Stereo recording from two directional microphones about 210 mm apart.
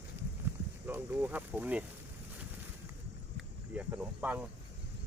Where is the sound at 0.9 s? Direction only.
10° right (ahead or behind).